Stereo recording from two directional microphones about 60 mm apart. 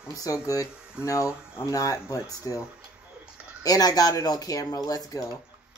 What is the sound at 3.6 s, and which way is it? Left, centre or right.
Speech, left.